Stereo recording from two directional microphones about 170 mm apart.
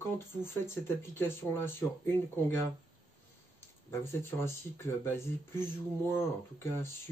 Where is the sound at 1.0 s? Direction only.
15° left (ahead or behind).